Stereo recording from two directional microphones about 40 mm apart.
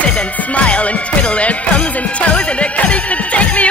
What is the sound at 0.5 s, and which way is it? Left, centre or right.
Speech, left.